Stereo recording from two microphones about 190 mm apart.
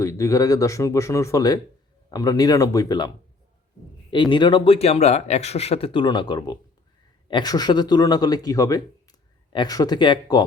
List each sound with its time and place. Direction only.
0.0 s speech: 15° left (ahead or behind)
4.1 s speech: 25° left (ahead or behind)